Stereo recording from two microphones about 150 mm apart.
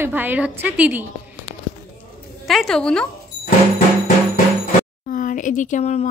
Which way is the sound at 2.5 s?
Centre (ahead or behind).